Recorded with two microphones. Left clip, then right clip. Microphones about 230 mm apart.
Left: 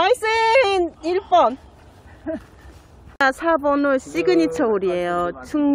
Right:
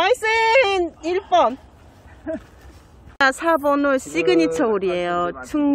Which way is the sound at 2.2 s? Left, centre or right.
Left.